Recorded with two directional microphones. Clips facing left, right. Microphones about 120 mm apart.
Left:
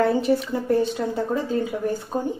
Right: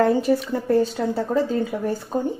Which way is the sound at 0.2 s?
35° right (ahead or behind).